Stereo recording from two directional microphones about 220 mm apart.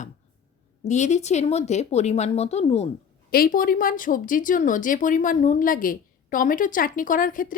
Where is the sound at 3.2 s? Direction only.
45° left (ahead or behind).